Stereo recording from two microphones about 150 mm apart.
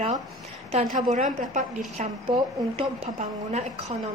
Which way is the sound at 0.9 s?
55° right (ahead or behind).